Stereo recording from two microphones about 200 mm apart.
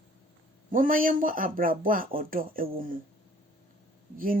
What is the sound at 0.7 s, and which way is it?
Speech, 45° right (ahead or behind).